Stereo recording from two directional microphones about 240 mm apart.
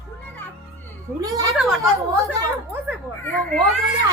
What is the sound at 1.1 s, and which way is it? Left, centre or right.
Speech, centre.